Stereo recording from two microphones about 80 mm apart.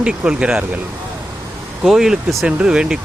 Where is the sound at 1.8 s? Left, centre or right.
Centre.